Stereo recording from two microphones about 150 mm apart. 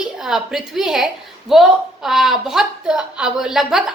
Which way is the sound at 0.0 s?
5° right (ahead or behind).